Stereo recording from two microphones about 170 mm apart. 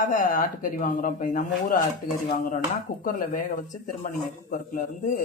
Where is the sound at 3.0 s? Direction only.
55° left (ahead or behind).